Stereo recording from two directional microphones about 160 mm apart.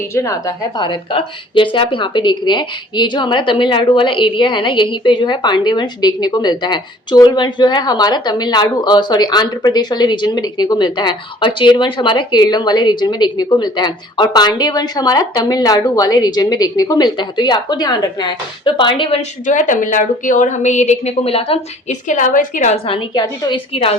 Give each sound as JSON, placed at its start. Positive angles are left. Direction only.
{"t": 0.1, "sound": "a woman's voice", "side_deg": 20}
{"t": 19.5, "sound": "a woman's voice", "side_deg": 55}
{"t": 22.0, "sound": "a woman's voice", "side_deg": 55}
{"t": 22.9, "sound": "a woman's voice", "side_deg": 30}
{"t": 23.7, "sound": "a woman's voice", "side_deg": 35}